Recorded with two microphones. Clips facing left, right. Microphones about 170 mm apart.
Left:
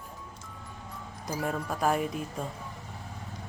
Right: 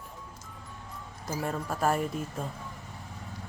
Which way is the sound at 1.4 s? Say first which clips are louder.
Even; centre (ahead or behind).